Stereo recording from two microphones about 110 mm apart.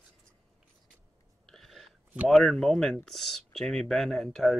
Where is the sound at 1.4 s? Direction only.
5° left (ahead or behind).